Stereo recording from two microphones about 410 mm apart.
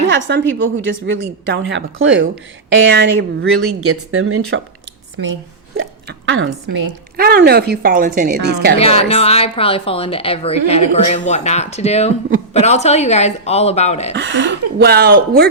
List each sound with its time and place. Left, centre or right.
0.3 s a woman's voice: right
8.8 s a woman's voice: centre
14.2 s speech: right